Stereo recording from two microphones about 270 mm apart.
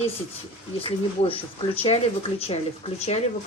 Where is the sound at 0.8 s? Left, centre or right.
Centre.